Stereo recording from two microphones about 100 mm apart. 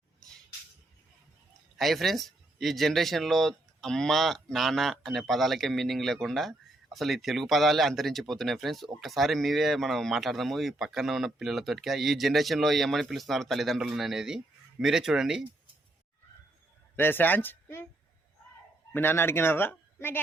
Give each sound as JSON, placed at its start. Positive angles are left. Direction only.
{"t": 1.8, "sound": "speech", "side_deg": 0}
{"t": 17.0, "sound": "speech", "side_deg": 20}
{"t": 18.9, "sound": "speech", "side_deg": 20}